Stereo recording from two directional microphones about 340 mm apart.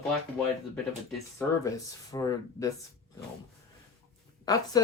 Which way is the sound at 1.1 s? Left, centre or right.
Centre.